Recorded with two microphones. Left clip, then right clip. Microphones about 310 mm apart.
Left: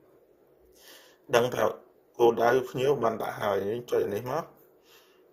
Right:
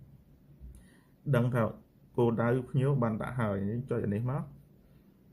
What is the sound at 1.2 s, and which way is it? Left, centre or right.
Speech, centre.